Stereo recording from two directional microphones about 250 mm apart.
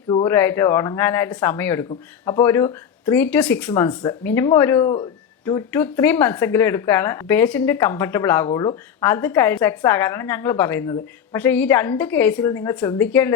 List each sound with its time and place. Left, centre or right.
0.1 s a woman's voice: centre